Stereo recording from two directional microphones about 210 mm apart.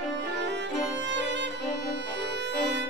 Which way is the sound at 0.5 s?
60° right (ahead or behind).